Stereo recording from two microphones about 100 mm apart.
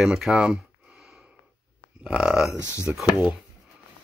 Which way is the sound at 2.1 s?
5° right (ahead or behind).